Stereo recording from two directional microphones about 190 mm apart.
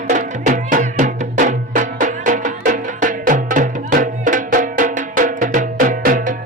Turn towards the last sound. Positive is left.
turn(degrees=-45)  # may be behind; listen again after turning